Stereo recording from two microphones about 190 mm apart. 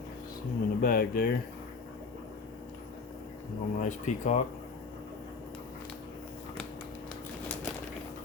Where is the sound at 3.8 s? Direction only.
40° left (ahead or behind).